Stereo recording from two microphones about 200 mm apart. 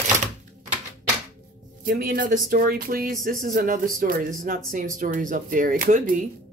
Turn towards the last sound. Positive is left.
turn(degrees=-45)  # may be behind; listen again after turning